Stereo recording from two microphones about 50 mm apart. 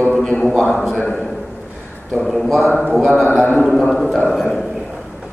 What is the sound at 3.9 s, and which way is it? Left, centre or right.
Speech, centre.